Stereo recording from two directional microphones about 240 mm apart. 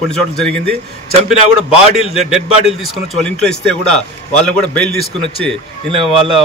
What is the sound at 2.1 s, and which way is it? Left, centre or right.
A man's voice, centre.